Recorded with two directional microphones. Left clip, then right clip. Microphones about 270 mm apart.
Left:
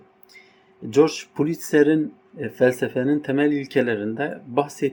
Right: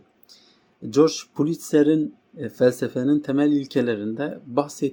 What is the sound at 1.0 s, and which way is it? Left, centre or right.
Speech, centre.